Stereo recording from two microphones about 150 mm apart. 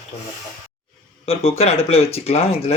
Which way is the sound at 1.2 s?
45° left (ahead or behind).